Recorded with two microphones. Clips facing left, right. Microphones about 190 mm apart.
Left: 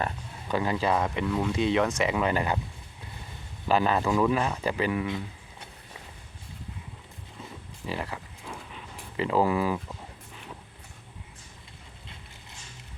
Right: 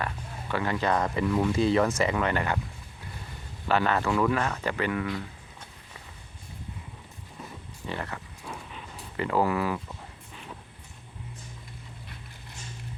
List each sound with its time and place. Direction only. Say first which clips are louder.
0.0 s speech: left 2 dB; 15° left (ahead or behind); by 2.1 s centre (ahead or behind)
2.1 s speech: left 1 dB; 15° left (ahead or behind)
3.7 s speech: left 1 dB; 15° left (ahead or behind)
7.9 s speech: left 1 dB; 10° left (ahead or behind)
9.2 s speech: left 1 dB; 15° left (ahead or behind)